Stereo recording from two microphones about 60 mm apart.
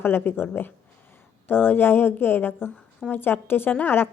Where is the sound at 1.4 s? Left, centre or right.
Left.